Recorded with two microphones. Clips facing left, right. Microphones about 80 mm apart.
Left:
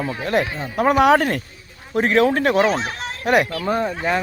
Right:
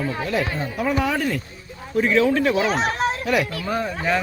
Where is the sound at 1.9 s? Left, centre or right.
Left.